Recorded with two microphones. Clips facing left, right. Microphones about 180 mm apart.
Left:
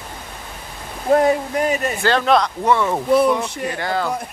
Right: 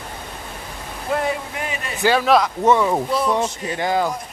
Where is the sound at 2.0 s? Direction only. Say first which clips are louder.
Right 2 dB; 5° right (ahead or behind).